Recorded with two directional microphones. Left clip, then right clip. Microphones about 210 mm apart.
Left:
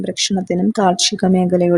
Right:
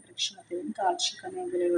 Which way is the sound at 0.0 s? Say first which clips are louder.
Left 14 dB; 55° left (ahead or behind).